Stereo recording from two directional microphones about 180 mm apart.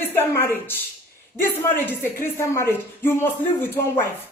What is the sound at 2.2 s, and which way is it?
A man's voice, 15° left (ahead or behind).